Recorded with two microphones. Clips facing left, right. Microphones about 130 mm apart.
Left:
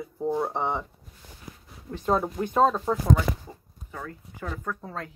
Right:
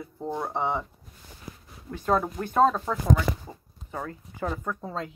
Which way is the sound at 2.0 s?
10° left (ahead or behind).